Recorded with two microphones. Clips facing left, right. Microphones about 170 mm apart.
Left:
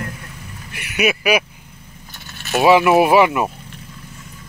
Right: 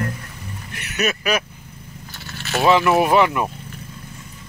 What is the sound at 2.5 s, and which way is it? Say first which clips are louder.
Speech: left 3 dB; 15° left (ahead or behind).